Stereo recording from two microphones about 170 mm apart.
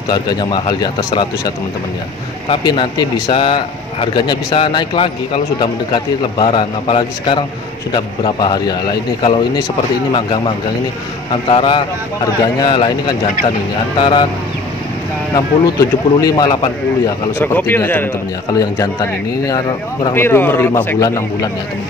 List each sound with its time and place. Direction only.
0.1 s a man's voice: 25° left (ahead or behind)
2.5 s a man's voice: 25° left (ahead or behind)
15.3 s a man's voice: 20° left (ahead or behind)
17.4 s a man's voice: 10° left (ahead or behind)
20.2 s a man's voice: 15° left (ahead or behind)